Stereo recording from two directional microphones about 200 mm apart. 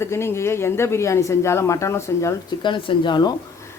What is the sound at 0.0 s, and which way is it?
A woman's voice, 15° left (ahead or behind).